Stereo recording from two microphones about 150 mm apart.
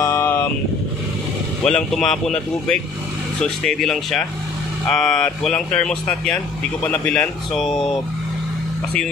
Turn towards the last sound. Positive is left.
turn(degrees=0)  # may be behind; listen again after turning